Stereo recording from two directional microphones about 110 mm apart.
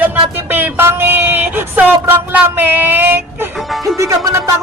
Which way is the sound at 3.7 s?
Centre (ahead or behind).